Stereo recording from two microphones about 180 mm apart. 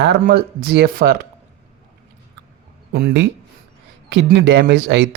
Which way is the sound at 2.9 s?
65° right (ahead or behind).